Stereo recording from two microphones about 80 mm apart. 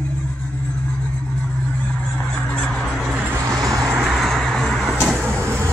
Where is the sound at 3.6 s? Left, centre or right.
Right.